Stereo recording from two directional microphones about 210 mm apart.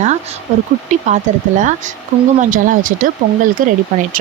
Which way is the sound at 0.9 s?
35° right (ahead or behind).